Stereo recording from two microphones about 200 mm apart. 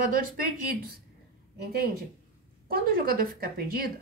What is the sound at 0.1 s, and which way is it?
Speech, 45° right (ahead or behind).